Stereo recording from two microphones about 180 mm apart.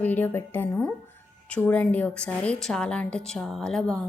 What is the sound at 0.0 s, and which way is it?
Speech, 10° left (ahead or behind).